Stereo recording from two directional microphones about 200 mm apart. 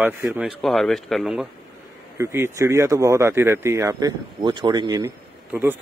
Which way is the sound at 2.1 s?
15° right (ahead or behind).